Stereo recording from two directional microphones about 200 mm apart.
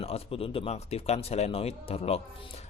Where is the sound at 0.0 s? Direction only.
30° left (ahead or behind).